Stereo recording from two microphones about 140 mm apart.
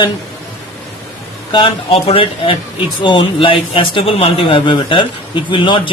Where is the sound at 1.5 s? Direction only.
35° left (ahead or behind).